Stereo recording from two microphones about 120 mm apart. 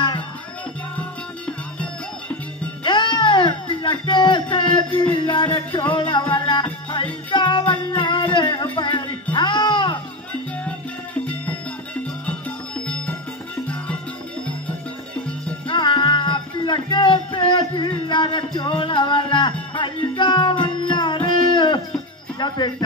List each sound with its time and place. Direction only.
0.9 s music: 10° left (ahead or behind)
2.8 s music: 40° left (ahead or behind)
11.2 s music: 10° left (ahead or behind)
15.6 s music: 40° left (ahead or behind)
22.4 s jingle bell: 40° left (ahead or behind)